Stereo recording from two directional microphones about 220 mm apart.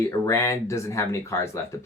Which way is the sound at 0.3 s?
15° left (ahead or behind).